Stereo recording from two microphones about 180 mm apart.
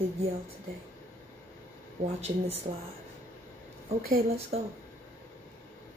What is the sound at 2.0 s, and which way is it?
Speech, 35° right (ahead or behind).